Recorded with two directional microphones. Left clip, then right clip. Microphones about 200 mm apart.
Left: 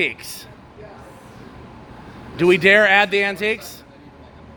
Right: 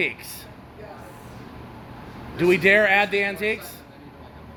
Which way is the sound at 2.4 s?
50° left (ahead or behind).